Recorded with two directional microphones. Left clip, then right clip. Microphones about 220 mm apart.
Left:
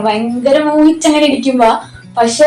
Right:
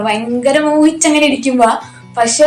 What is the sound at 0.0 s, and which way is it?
A woman's voice, 40° right (ahead or behind).